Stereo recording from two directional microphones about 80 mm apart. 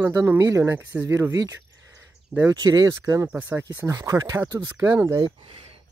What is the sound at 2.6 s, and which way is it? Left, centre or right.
Speech, right.